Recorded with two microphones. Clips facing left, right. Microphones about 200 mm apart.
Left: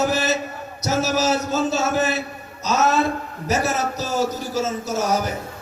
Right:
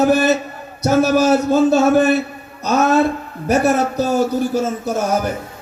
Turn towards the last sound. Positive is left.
turn(degrees=-55)  # may be behind; listen again after turning